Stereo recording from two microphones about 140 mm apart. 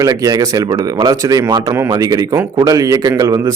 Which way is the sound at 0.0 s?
25° right (ahead or behind).